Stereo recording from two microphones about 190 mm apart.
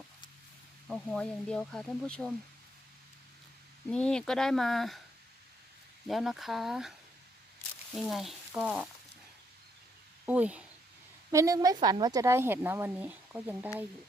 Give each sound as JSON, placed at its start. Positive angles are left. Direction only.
{"t": 0.9, "sound": "speech", "side_deg": 5}
{"t": 3.8, "sound": "speech", "side_deg": 5}
{"t": 6.1, "sound": "speech", "side_deg": 0}
{"t": 7.9, "sound": "speech", "side_deg": 0}
{"t": 10.2, "sound": "speech", "side_deg": -5}